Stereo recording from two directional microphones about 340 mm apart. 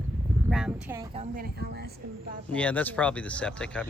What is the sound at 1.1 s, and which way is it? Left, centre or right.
Speech, right.